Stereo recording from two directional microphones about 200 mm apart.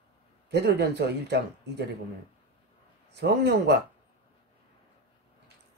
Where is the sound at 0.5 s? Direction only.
55° right (ahead or behind).